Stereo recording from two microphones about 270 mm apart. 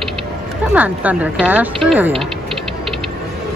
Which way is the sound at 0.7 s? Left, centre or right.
Centre.